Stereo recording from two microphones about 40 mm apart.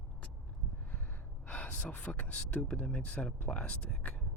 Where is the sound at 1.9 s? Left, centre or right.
Left.